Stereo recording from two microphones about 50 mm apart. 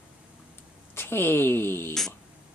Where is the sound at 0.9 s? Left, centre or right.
Left.